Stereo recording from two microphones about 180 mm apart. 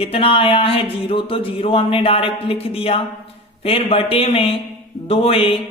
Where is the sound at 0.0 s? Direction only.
30° left (ahead or behind).